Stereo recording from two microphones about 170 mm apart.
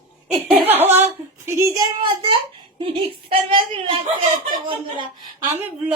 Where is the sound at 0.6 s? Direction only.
10° right (ahead or behind).